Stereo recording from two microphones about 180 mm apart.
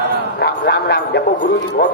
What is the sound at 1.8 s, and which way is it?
Music, 65° left (ahead or behind).